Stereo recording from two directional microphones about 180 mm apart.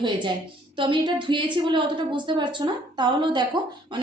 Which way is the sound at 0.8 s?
25° right (ahead or behind).